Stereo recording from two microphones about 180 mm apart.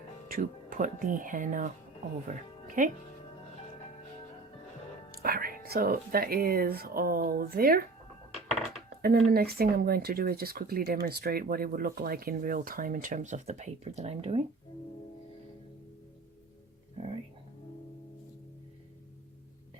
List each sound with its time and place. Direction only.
0.3 s speech: 50° right (ahead or behind)
5.1 s speech: 55° right (ahead or behind)
9.0 s speech: 55° right (ahead or behind); by 14.4 s 35° right (ahead or behind)